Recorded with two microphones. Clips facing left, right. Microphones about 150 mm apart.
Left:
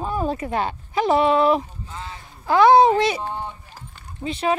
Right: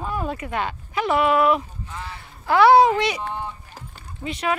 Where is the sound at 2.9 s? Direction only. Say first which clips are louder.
Left 3 dB; 35° left (ahead or behind).